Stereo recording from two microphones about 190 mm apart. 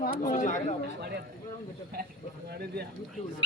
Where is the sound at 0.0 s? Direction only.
40° left (ahead or behind).